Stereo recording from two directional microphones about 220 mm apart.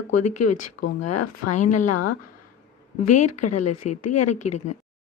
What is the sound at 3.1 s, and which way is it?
Speech, 90° left.